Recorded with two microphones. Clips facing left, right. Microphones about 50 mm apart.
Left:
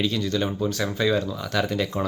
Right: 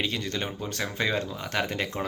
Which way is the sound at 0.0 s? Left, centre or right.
Right.